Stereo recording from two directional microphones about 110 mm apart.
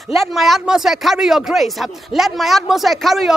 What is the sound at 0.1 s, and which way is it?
Speech, centre (ahead or behind).